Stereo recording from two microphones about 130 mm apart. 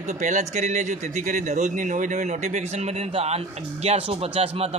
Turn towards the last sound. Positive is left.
turn(degrees=-50)  # may be behind; listen again after turning